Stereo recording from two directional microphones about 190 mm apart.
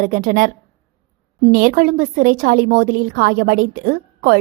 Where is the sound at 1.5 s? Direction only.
45° right (ahead or behind).